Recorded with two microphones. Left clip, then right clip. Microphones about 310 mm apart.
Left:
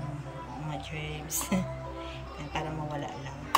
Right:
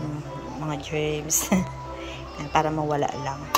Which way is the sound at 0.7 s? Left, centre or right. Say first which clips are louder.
Right 13 dB; centre.